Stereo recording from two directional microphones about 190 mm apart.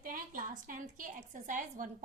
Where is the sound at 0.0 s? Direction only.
45° right (ahead or behind).